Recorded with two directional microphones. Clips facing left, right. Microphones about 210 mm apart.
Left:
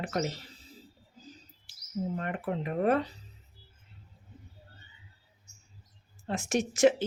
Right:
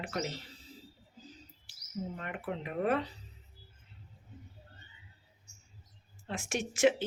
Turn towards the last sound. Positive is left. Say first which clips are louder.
# left 4 dB
turn(degrees=40)  # may be behind; listen again after turning